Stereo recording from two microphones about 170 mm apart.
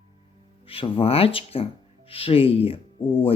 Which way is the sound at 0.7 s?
30° left (ahead or behind).